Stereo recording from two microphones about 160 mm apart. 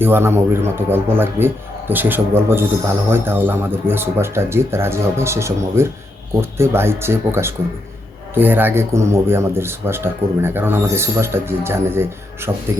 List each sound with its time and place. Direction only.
0.0 s a man's voice: 15° right (ahead or behind)